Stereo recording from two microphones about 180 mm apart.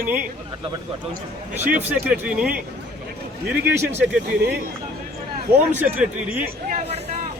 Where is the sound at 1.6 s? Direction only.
10° right (ahead or behind).